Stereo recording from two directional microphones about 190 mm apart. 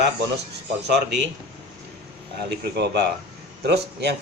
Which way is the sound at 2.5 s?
60° right (ahead or behind).